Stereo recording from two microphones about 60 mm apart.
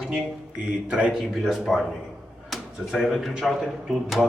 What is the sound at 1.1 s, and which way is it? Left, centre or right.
Speech, centre.